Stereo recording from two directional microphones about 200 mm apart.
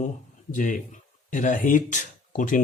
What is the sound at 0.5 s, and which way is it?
Speech, 40° left (ahead or behind).